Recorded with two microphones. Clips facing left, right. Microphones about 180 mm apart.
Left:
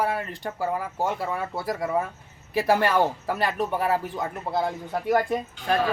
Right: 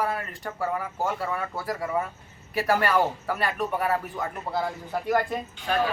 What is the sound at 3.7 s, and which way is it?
Speech, 30° left (ahead or behind).